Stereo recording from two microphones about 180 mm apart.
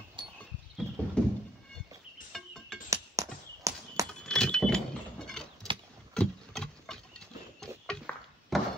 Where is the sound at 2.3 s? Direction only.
Centre (ahead or behind).